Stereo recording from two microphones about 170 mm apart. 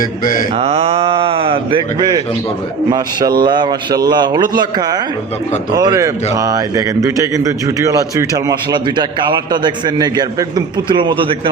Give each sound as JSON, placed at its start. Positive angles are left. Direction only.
{"t": 0.0, "sound": "mantra", "side_deg": 55}
{"t": 0.5, "sound": "a man's voice", "side_deg": -35}